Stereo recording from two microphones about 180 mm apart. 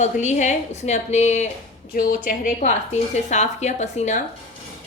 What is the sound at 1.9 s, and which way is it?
Speech, 50° left (ahead or behind).